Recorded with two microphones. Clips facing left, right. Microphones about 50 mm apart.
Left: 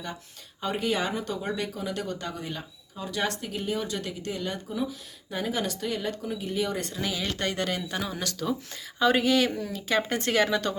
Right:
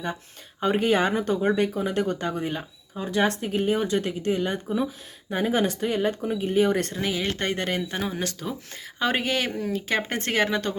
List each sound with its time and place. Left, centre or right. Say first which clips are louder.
0.6 s speech: right 6 dB; right
8.8 s speech: left 2 dB; right